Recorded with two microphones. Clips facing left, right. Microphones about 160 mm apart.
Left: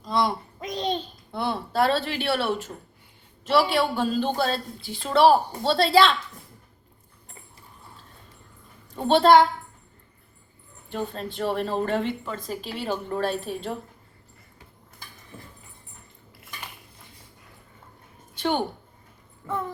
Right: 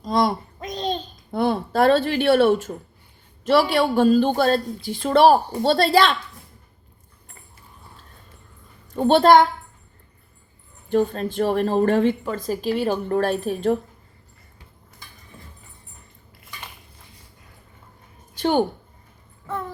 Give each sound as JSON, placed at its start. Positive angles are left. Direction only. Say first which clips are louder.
{"t": 0.0, "sound": "a sound", "louder": "right 4 dB", "side_deg": -40}
{"t": 0.6, "sound": "babbling", "louder": "right 1 dB", "side_deg": 10}
{"t": 1.3, "sound": "a woman's voice", "louder": "right 7 dB", "side_deg": -45}
{"t": 9.0, "sound": "a woman's voice", "louder": "right 2 dB", "side_deg": -45}
{"t": 10.9, "sound": "a woman's voice", "louder": "right 10 dB", "side_deg": -50}